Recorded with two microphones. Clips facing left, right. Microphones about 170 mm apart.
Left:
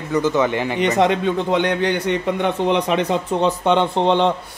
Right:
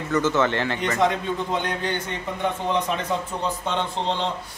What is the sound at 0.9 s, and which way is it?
A man's voice, 75° left (ahead or behind).